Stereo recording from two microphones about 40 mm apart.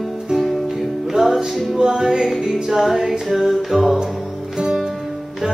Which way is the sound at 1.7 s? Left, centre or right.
Right.